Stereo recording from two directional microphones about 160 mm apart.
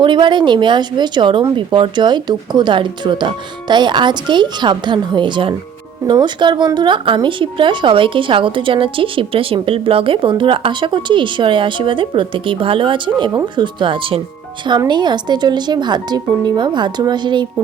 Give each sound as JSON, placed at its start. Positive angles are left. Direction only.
{"t": 0.0, "sound": "a woman's voice", "side_deg": -30}